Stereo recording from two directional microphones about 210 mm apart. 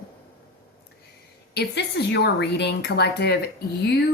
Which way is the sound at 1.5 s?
55° left (ahead or behind).